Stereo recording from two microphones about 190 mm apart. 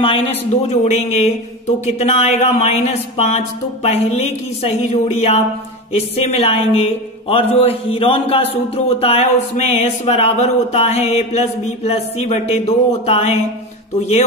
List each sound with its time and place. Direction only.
0.0 s speech: 30° left (ahead or behind)